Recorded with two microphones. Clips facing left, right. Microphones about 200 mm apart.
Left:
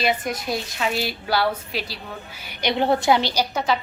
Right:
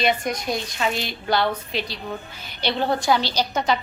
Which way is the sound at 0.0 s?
5° left (ahead or behind).